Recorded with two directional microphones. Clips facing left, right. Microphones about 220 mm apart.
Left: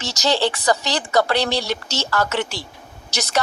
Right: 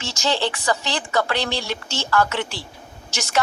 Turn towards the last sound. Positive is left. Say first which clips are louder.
# left 3 dB
turn(degrees=35)  # may be behind; listen again after turning